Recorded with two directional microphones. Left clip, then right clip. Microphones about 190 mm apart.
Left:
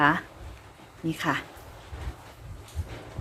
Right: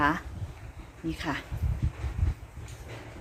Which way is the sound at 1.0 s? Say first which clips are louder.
Left 5 dB; 15° left (ahead or behind).